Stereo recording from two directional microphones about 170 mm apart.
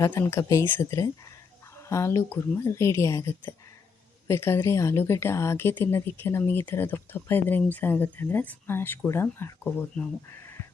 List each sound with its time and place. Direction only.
0.0 s speech: 15° left (ahead or behind)